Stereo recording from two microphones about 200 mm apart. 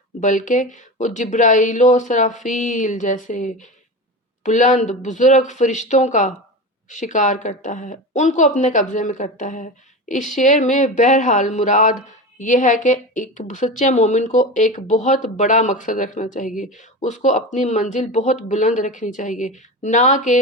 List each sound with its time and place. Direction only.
0.2 s a woman's voice: 40° left (ahead or behind)